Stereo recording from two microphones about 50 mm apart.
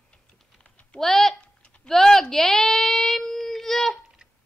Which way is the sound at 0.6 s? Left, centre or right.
Left.